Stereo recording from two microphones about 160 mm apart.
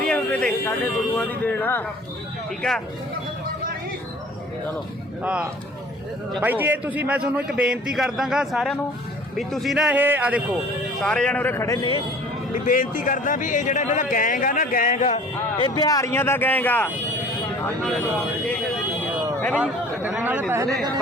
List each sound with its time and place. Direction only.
0.0 s a man's voice: 5° left (ahead or behind)
5.2 s a man's voice: 5° right (ahead or behind)
11.0 s speech: 5° left (ahead or behind)
12.6 s speech: 60° left (ahead or behind)
15.5 s speech: 25° left (ahead or behind); by 16.9 s 10° left (ahead or behind)
19.5 s a man's voice: 10° right (ahead or behind)